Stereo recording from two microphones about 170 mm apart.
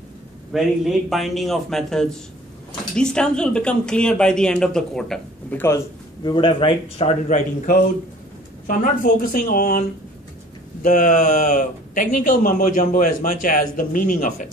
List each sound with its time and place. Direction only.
0.5 s speech: centre (ahead or behind)
6.2 s speech: 30° left (ahead or behind)
7.2 s speech: 50° left (ahead or behind)